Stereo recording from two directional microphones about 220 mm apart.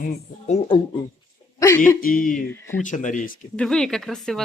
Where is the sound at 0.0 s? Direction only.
30° left (ahead or behind).